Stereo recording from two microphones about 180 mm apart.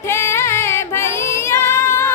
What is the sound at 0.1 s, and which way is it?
Female singing, 15° left (ahead or behind).